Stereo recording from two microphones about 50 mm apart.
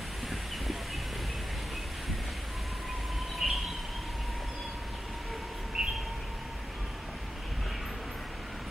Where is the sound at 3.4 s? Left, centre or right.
Centre.